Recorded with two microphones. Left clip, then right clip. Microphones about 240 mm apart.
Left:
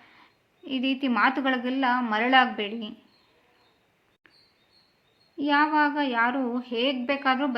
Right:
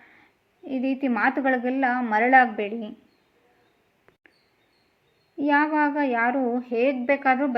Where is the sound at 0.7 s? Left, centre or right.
Centre.